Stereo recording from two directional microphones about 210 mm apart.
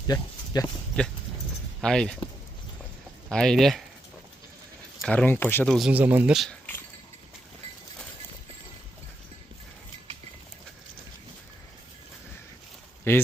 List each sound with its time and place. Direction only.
0.1 s speech: 20° left (ahead or behind)
0.9 s speech: 5° left (ahead or behind)
3.2 s speech: 5° left (ahead or behind)
5.0 s speech: 10° left (ahead or behind)
13.1 s speech: 10° left (ahead or behind)